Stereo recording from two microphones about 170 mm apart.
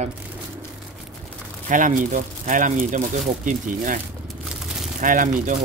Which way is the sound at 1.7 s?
50° right (ahead or behind).